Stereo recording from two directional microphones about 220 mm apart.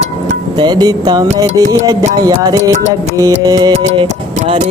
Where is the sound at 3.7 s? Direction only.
30° right (ahead or behind).